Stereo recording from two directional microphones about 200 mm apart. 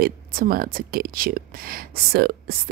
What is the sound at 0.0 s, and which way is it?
Speech, 45° right (ahead or behind).